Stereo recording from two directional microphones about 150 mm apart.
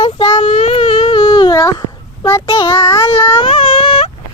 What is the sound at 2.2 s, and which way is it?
Speech, 25° left (ahead or behind).